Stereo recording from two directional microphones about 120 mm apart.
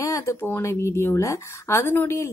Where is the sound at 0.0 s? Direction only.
25° left (ahead or behind).